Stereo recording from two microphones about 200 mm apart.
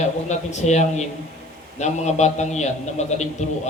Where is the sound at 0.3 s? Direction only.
35° left (ahead or behind).